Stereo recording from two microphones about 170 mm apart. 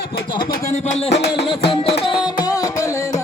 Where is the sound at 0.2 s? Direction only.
30° left (ahead or behind).